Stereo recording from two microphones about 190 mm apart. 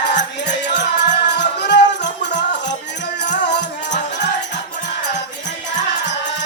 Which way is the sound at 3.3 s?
65° left (ahead or behind).